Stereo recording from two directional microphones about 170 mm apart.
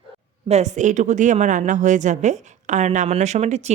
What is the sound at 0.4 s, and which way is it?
A woman's voice, 40° right (ahead or behind).